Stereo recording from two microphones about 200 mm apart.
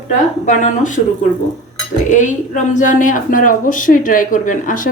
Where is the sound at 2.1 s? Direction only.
40° left (ahead or behind).